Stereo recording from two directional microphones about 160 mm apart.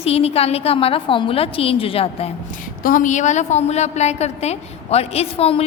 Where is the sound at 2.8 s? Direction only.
55° left (ahead or behind).